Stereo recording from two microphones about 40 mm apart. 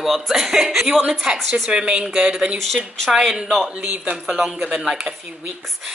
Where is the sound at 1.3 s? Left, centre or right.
Right.